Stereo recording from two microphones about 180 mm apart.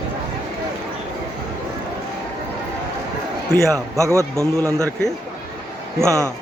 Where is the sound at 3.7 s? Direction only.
15° right (ahead or behind).